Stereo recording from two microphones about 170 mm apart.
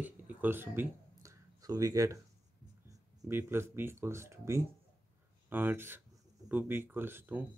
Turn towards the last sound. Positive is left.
turn(degrees=-10)  # may be behind; listen again after turning